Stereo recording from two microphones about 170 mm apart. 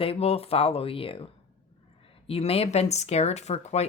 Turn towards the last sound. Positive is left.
turn(degrees=40)  # may be behind; listen again after turning